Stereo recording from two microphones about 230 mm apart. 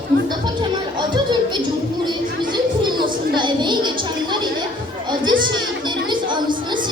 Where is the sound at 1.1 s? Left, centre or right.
Centre.